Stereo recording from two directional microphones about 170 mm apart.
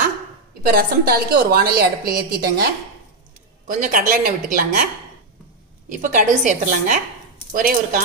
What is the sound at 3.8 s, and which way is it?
A woman's voice, 55° right (ahead or behind).